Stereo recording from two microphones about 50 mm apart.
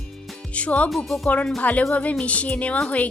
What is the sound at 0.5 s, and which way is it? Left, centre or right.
Music, left.